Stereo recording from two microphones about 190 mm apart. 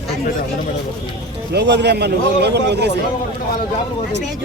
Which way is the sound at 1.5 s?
65° right (ahead or behind).